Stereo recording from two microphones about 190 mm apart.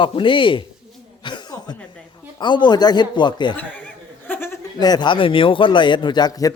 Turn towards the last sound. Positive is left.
turn(degrees=20)  # may be behind; listen again after turning